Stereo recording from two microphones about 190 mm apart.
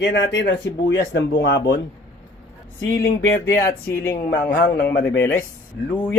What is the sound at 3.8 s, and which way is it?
Speech, 10° left (ahead or behind).